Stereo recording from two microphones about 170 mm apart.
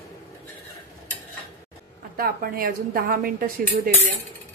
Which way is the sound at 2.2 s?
60° right (ahead or behind).